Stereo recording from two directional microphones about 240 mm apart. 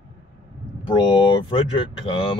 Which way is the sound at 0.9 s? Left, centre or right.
Centre.